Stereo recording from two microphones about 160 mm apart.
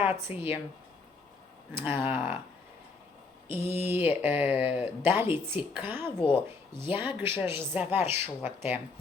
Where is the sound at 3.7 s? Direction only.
15° right (ahead or behind).